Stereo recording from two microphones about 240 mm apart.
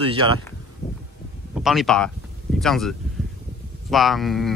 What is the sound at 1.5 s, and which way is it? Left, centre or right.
Speech, centre.